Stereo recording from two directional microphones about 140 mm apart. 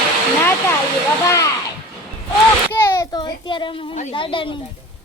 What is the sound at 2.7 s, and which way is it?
A child's voice, 25° left (ahead or behind).